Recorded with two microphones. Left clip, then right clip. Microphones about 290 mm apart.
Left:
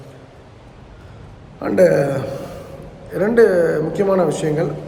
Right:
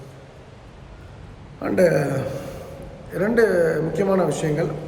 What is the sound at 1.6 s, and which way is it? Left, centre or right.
A man's voice, centre.